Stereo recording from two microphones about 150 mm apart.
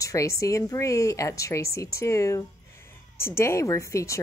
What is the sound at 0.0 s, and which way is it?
Speech, 20° left (ahead or behind).